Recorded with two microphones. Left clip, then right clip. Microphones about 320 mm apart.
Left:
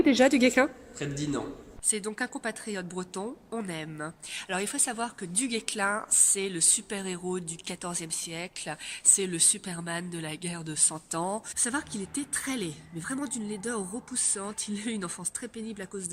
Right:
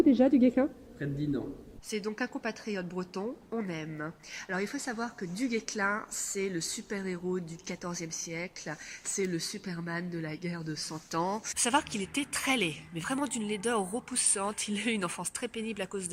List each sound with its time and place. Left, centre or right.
0.0 s a woman's voice: left
1.9 s speech: centre